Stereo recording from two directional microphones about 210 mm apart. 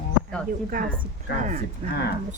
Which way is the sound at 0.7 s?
40° right (ahead or behind).